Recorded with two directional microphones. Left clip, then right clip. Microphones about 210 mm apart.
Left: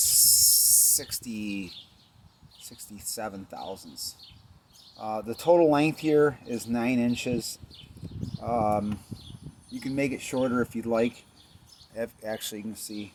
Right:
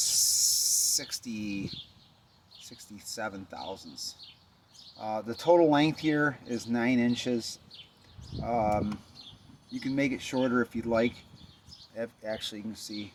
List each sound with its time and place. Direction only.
0.1 s a sound: 25° left (ahead or behind)
2.6 s speech: 25° left (ahead or behind)
9.8 s speech: 25° left (ahead or behind)